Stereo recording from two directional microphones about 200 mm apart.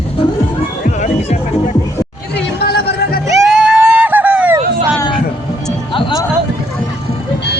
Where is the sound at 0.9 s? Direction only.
35° left (ahead or behind).